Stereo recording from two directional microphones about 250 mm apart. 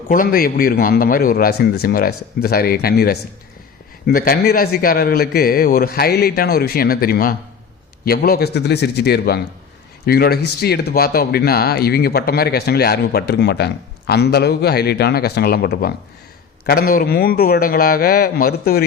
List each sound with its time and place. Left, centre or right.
0.1 s speech: left